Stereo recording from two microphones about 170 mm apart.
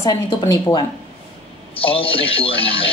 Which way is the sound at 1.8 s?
35° left (ahead or behind).